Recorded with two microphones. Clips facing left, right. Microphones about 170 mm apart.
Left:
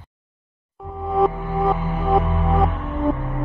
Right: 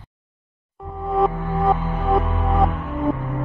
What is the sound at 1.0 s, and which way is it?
Music, centre (ahead or behind).